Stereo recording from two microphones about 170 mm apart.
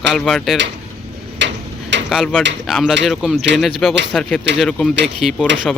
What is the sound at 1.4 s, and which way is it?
Tick-tock, 90° right.